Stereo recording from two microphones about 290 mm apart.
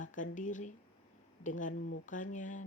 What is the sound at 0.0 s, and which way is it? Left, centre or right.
Speech, left.